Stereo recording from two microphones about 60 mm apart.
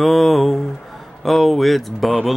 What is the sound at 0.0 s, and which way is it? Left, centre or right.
Speech, centre.